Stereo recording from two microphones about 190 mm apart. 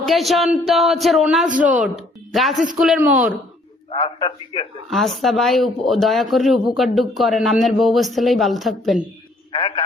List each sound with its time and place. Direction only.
0.0 s speech: centre (ahead or behind)
1.6 s speech: 40° right (ahead or behind)
2.3 s speech: centre (ahead or behind)
3.9 s a man's voice: 25° left (ahead or behind)
4.9 s speech: centre (ahead or behind)
9.5 s a man's voice: 25° left (ahead or behind)